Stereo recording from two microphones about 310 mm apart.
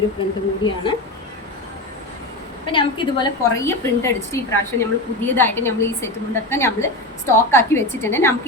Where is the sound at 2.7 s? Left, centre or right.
Centre.